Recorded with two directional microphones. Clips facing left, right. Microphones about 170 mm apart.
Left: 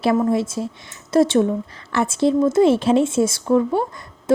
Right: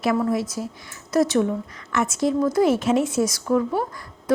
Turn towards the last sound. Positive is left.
turn(degrees=25)  # may be behind; listen again after turning